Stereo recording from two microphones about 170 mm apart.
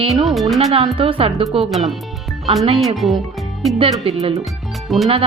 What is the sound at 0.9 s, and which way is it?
Speech, 35° right (ahead or behind).